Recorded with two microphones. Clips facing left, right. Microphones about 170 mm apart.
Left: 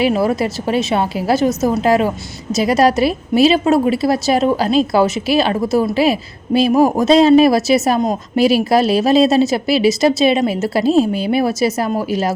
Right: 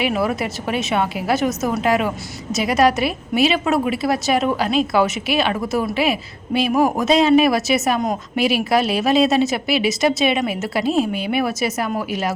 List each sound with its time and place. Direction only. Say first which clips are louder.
0.0 s a woman's voice: left 5 dB; 35° left (ahead or behind)